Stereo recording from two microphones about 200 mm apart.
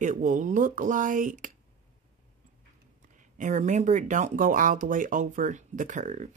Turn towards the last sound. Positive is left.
turn(degrees=-35)  # may be behind; listen again after turning